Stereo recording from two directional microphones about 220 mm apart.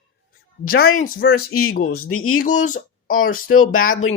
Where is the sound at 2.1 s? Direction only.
75° left (ahead or behind).